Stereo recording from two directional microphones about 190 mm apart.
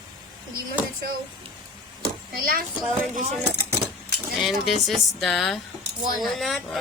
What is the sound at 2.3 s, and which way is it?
Speech, 50° right (ahead or behind).